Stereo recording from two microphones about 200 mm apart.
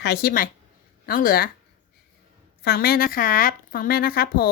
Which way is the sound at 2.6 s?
50° left (ahead or behind).